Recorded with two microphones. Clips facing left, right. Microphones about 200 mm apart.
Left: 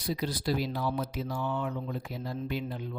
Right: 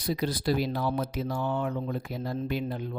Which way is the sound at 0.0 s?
70° right (ahead or behind).